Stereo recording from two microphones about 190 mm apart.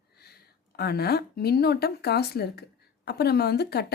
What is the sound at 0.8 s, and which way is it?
Speech, 55° left (ahead or behind).